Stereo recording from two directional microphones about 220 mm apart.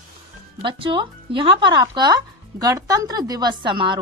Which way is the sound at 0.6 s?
25° right (ahead or behind).